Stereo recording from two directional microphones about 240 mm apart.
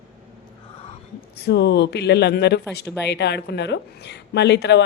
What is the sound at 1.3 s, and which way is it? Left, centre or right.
A woman's voice, left.